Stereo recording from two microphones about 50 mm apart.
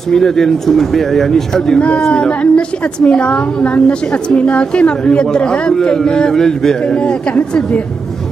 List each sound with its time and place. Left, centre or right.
0.1 s a man's voice: centre
1.8 s a woman's voice: left
6.8 s a woman's voice: left